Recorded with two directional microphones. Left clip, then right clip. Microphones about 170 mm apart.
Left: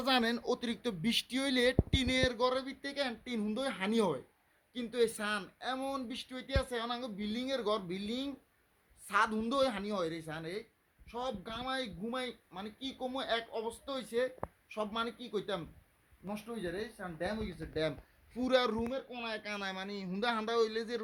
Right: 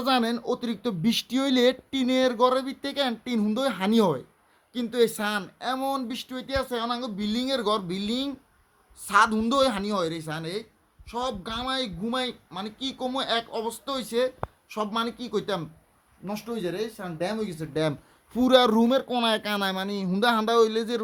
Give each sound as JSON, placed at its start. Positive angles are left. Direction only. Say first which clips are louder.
{"t": 0.0, "sound": "a man's voice", "louder": "right 7 dB", "side_deg": 0}
{"t": 18.3, "sound": "speech", "louder": "right 11 dB", "side_deg": -15}
{"t": 18.8, "sound": "speech", "louder": "right 15 dB", "side_deg": -30}
{"t": 19.2, "sound": "speech", "louder": "right 14 dB", "side_deg": -20}